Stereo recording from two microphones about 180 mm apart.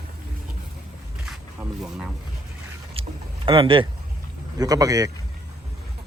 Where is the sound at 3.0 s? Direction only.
30° right (ahead or behind).